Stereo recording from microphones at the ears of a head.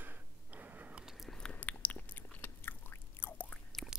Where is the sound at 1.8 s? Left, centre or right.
Left.